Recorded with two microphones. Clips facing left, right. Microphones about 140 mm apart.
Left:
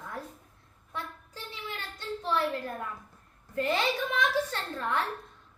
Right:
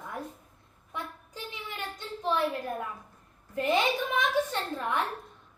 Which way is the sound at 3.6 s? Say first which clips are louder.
Right 2 dB; 20° right (ahead or behind).